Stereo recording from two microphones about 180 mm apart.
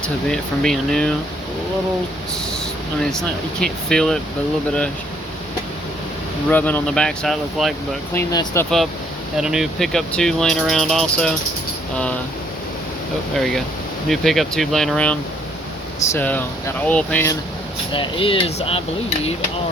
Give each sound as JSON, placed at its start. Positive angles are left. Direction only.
{"t": 0.3, "sound": "speech", "side_deg": 0}
{"t": 3.0, "sound": "speech", "side_deg": 5}
{"t": 6.5, "sound": "speech", "side_deg": 10}
{"t": 8.1, "sound": "speech", "side_deg": 15}
{"t": 9.4, "sound": "speech", "side_deg": -5}
{"t": 13.3, "sound": "speech", "side_deg": 0}
{"t": 17.9, "sound": "speech", "side_deg": 30}